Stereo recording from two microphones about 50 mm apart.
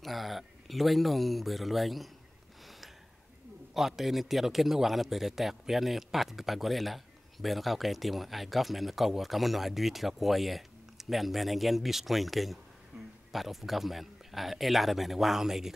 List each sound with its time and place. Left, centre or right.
0.0 s speech: centre
3.7 s speech: centre